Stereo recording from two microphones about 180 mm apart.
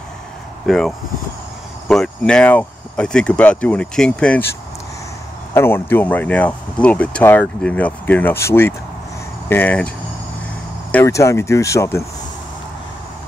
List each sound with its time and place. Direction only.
0.7 s speech: centre (ahead or behind)
5.5 s speech: 15° left (ahead or behind)
10.9 s speech: 15° left (ahead or behind)